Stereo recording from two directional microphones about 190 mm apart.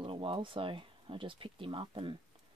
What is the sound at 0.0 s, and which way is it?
Speech, 30° right (ahead or behind).